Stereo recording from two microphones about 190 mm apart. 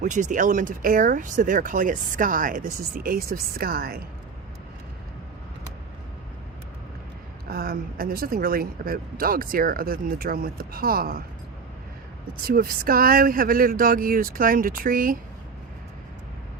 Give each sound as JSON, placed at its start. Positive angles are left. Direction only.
{"t": 0.0, "sound": "speech", "side_deg": -40}
{"t": 7.4, "sound": "speech", "side_deg": -50}
{"t": 12.5, "sound": "speech", "side_deg": -50}